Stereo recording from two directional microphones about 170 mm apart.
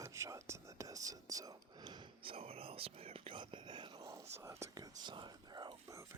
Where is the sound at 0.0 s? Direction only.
15° right (ahead or behind).